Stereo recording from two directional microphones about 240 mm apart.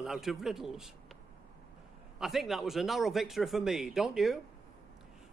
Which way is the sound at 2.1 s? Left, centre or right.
Centre.